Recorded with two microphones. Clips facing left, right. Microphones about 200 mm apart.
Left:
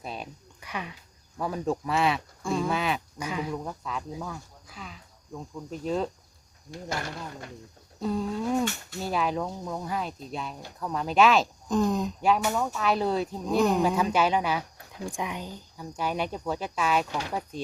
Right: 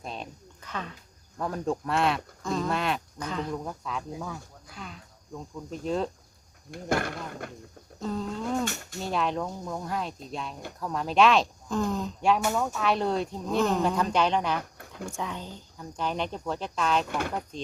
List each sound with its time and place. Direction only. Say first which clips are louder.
0.0 s a sound: left 1 dB; 5° left (ahead or behind)
1.4 s speech: left 1 dB; 5° left (ahead or behind)
6.7 s speech: right 5 dB; 55° right (ahead or behind)
8.0 s speech: left 3 dB; 10° left (ahead or behind)
11.7 s speech: left 4 dB; 15° left (ahead or behind)
12.5 s speech: even; centre (ahead or behind)
13.6 s speech: left 2 dB; 15° left (ahead or behind)
17.1 s speech: right 2 dB; 55° right (ahead or behind)